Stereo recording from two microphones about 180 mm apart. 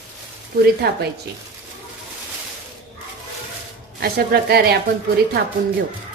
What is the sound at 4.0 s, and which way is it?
Speech, 60° right (ahead or behind).